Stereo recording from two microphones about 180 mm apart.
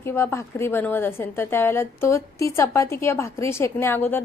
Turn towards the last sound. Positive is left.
turn(degrees=10)  # may be behind; listen again after turning